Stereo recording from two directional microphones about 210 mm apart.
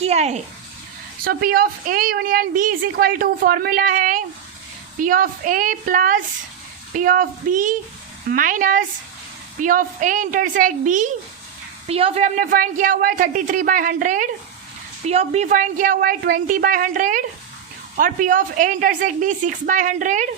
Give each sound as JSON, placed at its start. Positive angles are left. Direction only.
{"t": 0.0, "sound": "speech", "side_deg": -30}
{"t": 1.2, "sound": "a woman's voice", "side_deg": -45}